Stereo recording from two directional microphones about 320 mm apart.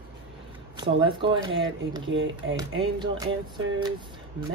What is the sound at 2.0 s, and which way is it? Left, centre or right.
Speech, right.